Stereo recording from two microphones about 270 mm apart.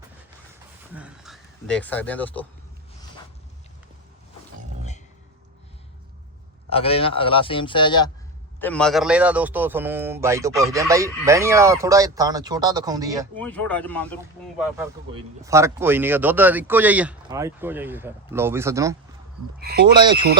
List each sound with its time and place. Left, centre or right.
0.9 s speech: centre
6.7 s a man's voice: left
8.6 s speech: centre
13.3 s speech: centre
15.1 s speech: centre
20.0 s speech: centre